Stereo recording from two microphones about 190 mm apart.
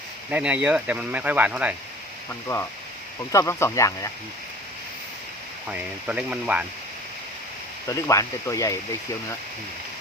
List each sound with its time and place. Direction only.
0.3 s speech: 10° right (ahead or behind)
3.3 s speech: 15° left (ahead or behind)
5.6 s speech: 5° right (ahead or behind)
7.9 s speech: 15° left (ahead or behind)